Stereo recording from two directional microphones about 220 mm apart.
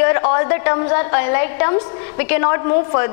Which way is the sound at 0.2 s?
20° left (ahead or behind).